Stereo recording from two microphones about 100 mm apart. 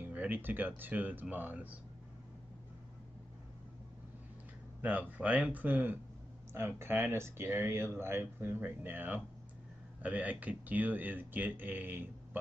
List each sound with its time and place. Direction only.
0.0 s speech: 15° right (ahead or behind)
4.8 s speech: 15° right (ahead or behind)